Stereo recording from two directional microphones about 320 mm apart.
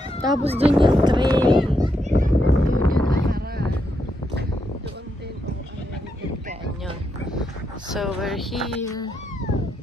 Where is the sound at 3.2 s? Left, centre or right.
Right.